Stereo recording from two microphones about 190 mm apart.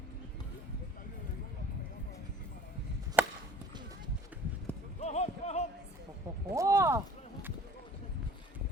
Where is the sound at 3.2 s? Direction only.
10° right (ahead or behind).